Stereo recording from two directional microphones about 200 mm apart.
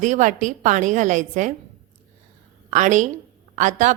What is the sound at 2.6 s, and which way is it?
A woman's voice, 40° right (ahead or behind).